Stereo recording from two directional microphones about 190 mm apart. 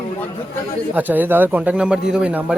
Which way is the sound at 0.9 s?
10° right (ahead or behind).